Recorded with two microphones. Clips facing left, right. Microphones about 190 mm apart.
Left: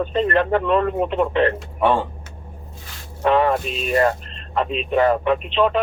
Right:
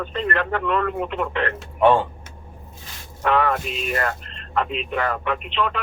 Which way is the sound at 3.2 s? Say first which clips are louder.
Left 3 dB; 25° left (ahead or behind).